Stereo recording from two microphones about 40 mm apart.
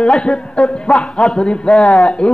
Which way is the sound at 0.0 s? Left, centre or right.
Left.